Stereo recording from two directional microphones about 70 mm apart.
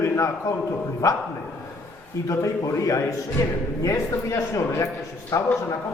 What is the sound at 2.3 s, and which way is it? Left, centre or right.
A man's voice, left.